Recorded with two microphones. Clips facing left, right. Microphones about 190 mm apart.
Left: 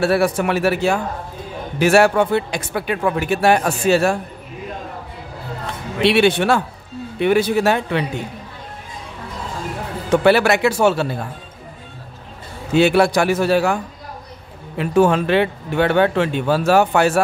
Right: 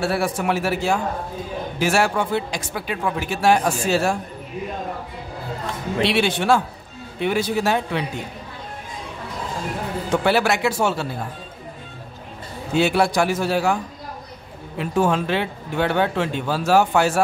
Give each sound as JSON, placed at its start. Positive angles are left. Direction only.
{"t": 0.0, "sound": "speech", "side_deg": 65}
{"t": 6.0, "sound": "speech", "side_deg": 65}
{"t": 10.2, "sound": "speech", "side_deg": 65}
{"t": 12.7, "sound": "speech", "side_deg": 65}
{"t": 14.8, "sound": "speech", "side_deg": 65}